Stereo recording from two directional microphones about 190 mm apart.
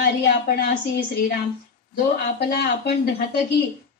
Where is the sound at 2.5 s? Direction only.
55° left (ahead or behind).